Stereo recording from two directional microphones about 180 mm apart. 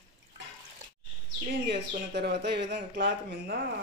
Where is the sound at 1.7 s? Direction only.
70° right (ahead or behind).